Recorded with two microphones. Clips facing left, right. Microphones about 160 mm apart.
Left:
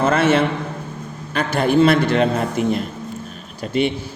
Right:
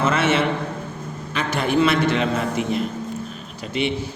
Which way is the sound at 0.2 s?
35° left (ahead or behind).